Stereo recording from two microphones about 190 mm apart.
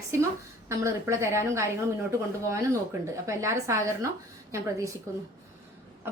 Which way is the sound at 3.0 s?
15° right (ahead or behind).